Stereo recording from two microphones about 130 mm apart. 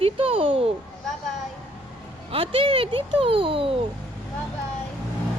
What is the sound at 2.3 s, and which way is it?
A child's voice, 45° right (ahead or behind).